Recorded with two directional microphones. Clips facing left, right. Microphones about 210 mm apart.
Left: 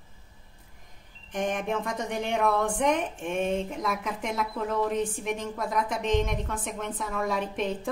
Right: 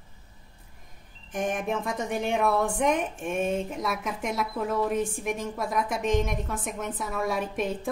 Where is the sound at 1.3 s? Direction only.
5° right (ahead or behind).